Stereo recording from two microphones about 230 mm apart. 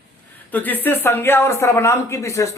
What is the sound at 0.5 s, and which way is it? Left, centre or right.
Speech, centre.